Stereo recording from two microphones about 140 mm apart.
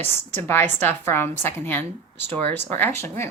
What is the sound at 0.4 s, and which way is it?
Speech, 15° left (ahead or behind).